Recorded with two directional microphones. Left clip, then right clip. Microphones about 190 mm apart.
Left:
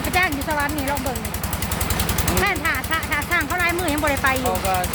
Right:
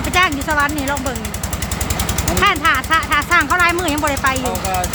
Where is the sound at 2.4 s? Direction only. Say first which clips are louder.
Right 9 dB; 20° right (ahead or behind).